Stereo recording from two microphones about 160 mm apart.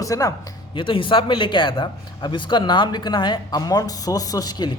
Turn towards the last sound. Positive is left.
turn(degrees=25)  # may be behind; listen again after turning